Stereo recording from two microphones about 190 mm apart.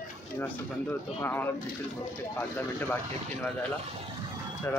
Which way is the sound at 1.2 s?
10° left (ahead or behind).